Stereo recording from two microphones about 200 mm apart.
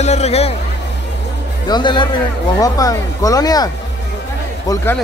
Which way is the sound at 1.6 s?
20° left (ahead or behind).